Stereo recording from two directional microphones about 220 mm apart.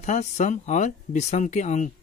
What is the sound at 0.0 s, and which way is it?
Speech, 30° left (ahead or behind).